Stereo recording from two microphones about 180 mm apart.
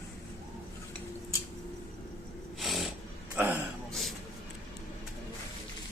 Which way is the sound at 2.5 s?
Centre (ahead or behind).